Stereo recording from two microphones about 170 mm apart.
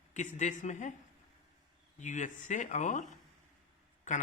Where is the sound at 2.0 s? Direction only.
45° left (ahead or behind).